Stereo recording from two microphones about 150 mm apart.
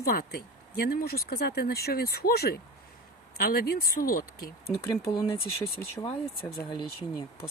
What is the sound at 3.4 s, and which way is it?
Speech, 80° left.